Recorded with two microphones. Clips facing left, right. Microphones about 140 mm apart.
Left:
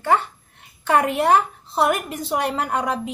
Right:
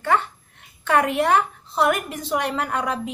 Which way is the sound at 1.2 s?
30° left (ahead or behind).